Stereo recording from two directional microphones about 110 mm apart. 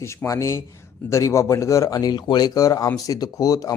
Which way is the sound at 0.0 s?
25° left (ahead or behind).